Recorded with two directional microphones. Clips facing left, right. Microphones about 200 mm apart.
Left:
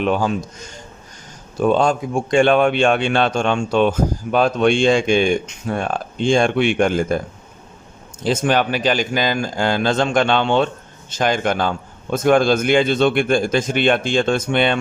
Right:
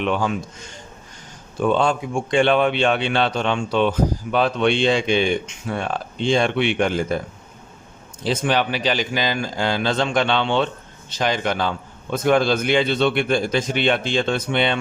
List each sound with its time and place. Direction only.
0.0 s a man's voice: 40° left (ahead or behind)
8.2 s a man's voice: 45° left (ahead or behind)